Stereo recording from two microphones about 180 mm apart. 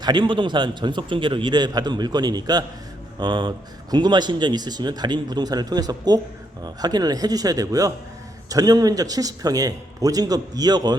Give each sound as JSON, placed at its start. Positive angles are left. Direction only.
{"t": 0.0, "sound": "a man's voice", "side_deg": -25}